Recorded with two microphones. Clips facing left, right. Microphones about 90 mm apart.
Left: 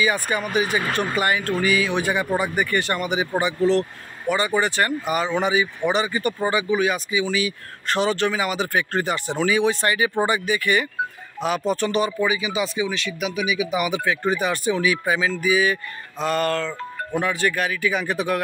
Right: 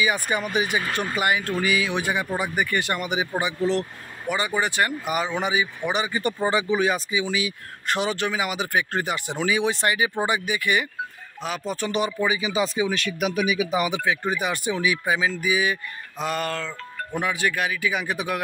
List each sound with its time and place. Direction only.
0.0 s speech: 15° right (ahead or behind)
6.5 s speech: 25° right (ahead or behind)
11.4 s speech: centre (ahead or behind); by 12.4 s 15° right (ahead or behind)
12.4 s speech: 35° right (ahead or behind)
12.9 s speech: 50° right (ahead or behind); by 18.4 s 10° right (ahead or behind)